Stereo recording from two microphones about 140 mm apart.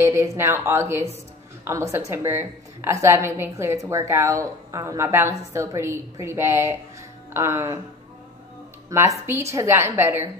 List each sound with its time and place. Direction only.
0.0 s a woman's voice: 20° right (ahead or behind)
8.9 s a woman's voice: 20° right (ahead or behind)